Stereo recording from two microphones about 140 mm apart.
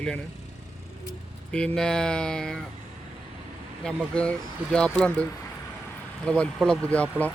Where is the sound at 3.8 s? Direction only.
5° left (ahead or behind).